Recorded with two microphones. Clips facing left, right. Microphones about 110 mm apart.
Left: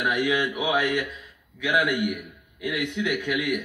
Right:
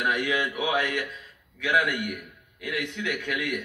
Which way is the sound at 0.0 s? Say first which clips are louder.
Left 2 dB; 10° left (ahead or behind).